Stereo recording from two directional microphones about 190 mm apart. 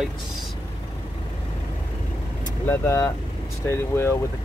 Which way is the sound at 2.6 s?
10° left (ahead or behind).